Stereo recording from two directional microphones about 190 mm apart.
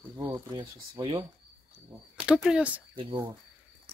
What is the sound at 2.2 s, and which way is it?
Speech, 5° right (ahead or behind).